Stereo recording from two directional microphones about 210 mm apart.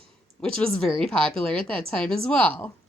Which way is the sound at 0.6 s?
5° left (ahead or behind).